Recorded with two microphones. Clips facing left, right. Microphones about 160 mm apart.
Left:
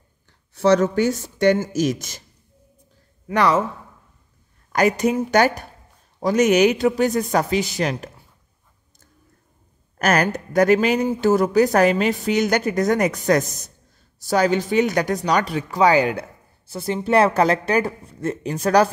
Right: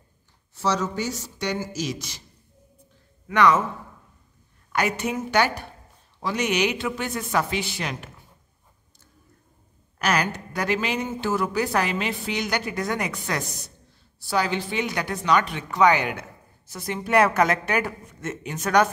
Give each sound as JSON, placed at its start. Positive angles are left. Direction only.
{"t": 0.6, "sound": "speech", "side_deg": 60}
{"t": 3.3, "sound": "a woman's voice", "side_deg": 30}
{"t": 4.7, "sound": "a woman's voice", "side_deg": 40}
{"t": 9.9, "sound": "a woman's voice", "side_deg": 50}